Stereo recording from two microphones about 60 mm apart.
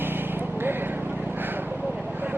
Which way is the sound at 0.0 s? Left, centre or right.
Right.